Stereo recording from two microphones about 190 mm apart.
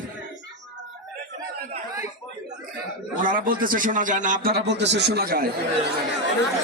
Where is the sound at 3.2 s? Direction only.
45° right (ahead or behind).